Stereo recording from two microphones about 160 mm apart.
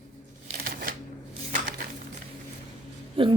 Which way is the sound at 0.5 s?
70° right (ahead or behind).